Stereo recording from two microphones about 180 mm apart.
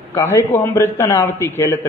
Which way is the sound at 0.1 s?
15° left (ahead or behind).